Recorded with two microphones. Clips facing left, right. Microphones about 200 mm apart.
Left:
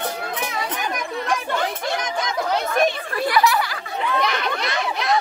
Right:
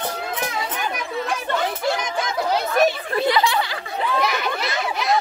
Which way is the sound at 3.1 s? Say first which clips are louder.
Even; 25° right (ahead or behind).